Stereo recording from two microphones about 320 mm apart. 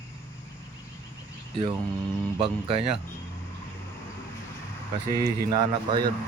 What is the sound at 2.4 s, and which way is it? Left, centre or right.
Speech, centre.